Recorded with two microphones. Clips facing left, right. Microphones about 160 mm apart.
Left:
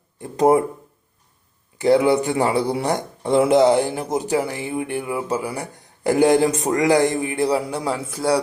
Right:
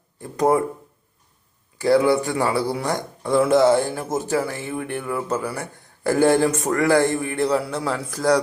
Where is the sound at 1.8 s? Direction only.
20° left (ahead or behind).